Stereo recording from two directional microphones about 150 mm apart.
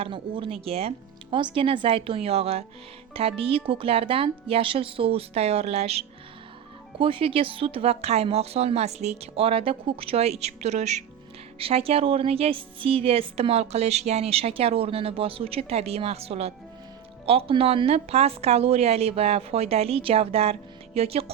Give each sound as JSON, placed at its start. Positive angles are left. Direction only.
{"t": 0.0, "sound": "a woman's voice", "side_deg": -35}